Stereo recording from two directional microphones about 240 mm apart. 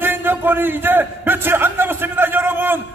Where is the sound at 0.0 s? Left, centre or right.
Centre.